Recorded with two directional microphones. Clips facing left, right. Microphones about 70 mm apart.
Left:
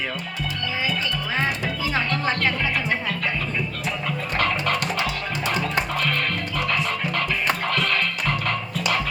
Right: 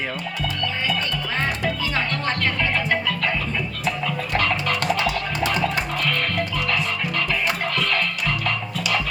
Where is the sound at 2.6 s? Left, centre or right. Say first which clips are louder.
Right 2 dB; right.